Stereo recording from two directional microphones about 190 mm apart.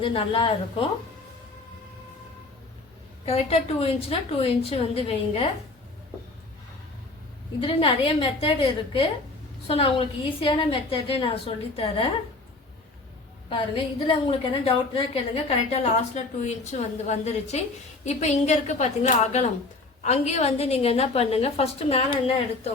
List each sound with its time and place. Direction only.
0.0 s a woman's voice: 25° left (ahead or behind)
3.2 s a woman's voice: 30° left (ahead or behind)
7.6 s a woman's voice: 30° left (ahead or behind)
13.5 s a woman's voice: 25° left (ahead or behind)